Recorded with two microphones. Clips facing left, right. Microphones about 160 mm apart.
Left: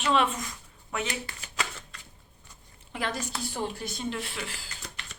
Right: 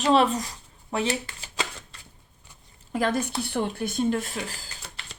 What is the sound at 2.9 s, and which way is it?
Speech, 50° right (ahead or behind).